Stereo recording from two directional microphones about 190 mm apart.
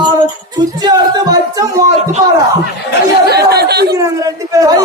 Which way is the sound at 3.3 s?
60° right (ahead or behind).